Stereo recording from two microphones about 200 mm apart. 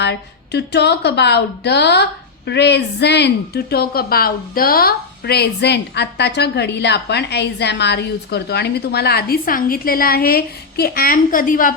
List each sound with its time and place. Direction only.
0.0 s a woman's voice: 55° left (ahead or behind)